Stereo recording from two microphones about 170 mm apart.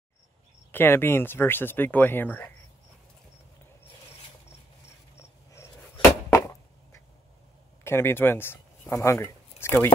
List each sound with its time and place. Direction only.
0.7 s speech: 15° left (ahead or behind)
5.5 s a sound: 15° left (ahead or behind)
7.8 s speech: 15° left (ahead or behind)